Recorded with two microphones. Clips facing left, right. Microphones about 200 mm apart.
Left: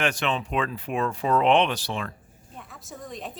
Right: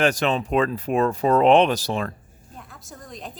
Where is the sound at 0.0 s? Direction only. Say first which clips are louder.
Right 5 dB; 40° right (ahead or behind).